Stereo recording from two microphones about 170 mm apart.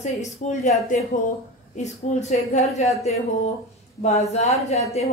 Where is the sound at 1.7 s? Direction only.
40° left (ahead or behind).